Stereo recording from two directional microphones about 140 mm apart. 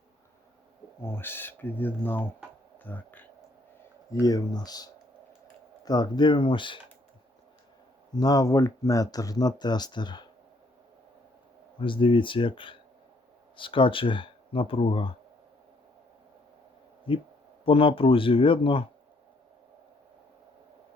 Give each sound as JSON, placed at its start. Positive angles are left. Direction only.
{"t": 1.0, "sound": "speech", "side_deg": 15}
{"t": 4.1, "sound": "speech", "side_deg": 25}
{"t": 8.1, "sound": "speech", "side_deg": 25}
{"t": 11.8, "sound": "speech", "side_deg": 40}
{"t": 17.1, "sound": "speech", "side_deg": 40}